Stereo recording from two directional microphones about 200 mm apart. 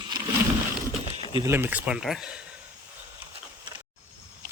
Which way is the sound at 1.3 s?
20° right (ahead or behind).